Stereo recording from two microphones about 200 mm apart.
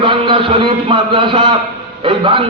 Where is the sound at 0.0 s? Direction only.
25° right (ahead or behind).